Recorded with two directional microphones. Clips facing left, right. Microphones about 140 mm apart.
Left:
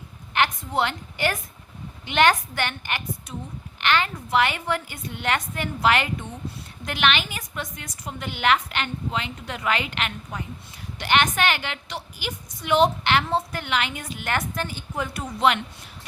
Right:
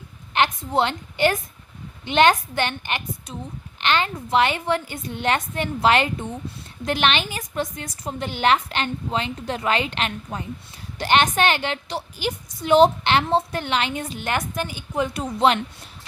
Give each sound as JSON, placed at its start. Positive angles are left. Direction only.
{"t": 0.3, "sound": "a woman's voice", "side_deg": -25}
{"t": 14.3, "sound": "a woman's voice", "side_deg": -15}